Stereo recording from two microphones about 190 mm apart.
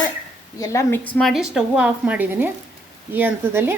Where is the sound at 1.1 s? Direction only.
Centre (ahead or behind).